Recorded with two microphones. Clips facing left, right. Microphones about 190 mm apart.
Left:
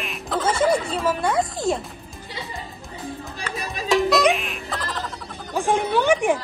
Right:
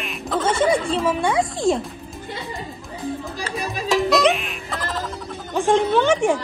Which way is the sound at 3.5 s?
Centre (ahead or behind).